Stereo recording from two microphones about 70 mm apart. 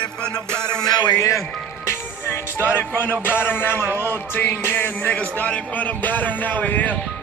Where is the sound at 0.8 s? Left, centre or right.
Left.